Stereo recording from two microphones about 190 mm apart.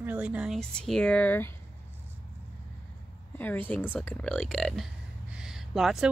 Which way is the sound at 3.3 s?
10° left (ahead or behind).